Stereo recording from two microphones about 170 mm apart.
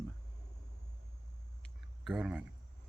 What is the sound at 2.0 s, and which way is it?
Speech, 5° right (ahead or behind).